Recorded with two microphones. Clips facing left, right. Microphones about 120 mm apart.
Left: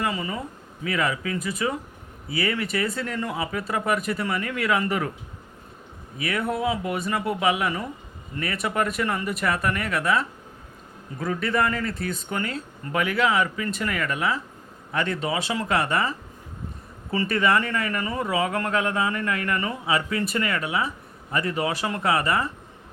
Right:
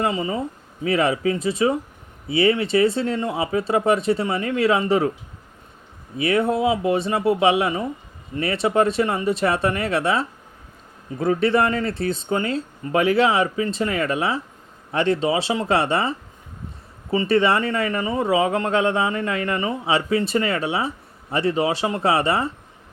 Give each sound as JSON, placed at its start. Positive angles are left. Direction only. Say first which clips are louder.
{"t": 0.0, "sound": "speech", "louder": "right 5 dB", "side_deg": -25}
{"t": 6.1, "sound": "speech", "louder": "right 7 dB", "side_deg": -25}